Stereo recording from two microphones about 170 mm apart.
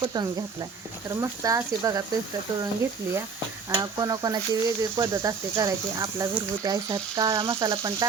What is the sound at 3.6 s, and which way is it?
Speech, 20° right (ahead or behind).